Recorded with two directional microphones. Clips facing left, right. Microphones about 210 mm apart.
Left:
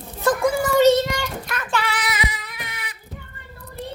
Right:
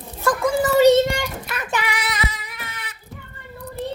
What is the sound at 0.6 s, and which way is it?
Child singing, 10° right (ahead or behind).